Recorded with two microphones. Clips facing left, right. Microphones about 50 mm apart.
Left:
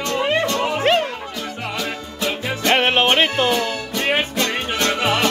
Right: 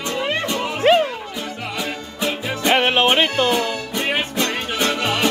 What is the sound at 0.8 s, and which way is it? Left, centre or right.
Music, centre.